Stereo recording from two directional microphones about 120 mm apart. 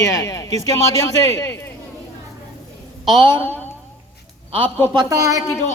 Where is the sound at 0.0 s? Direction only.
25° left (ahead or behind).